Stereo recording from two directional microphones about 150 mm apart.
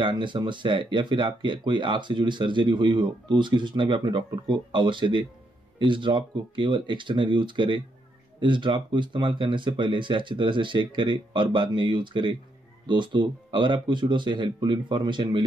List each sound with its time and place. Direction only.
0.0 s speech: 30° right (ahead or behind)